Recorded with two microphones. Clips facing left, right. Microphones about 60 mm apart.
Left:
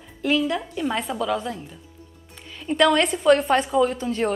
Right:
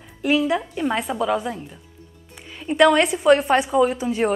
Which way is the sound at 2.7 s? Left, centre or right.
Centre.